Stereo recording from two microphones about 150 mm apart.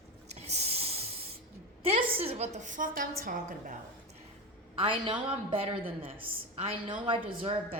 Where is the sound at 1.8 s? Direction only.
40° right (ahead or behind); by 3.8 s 65° right (ahead or behind).